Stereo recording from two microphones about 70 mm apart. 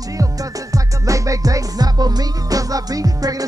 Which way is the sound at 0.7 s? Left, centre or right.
Right.